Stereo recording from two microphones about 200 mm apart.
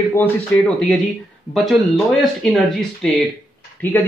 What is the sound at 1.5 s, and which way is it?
A man's voice, centre (ahead or behind).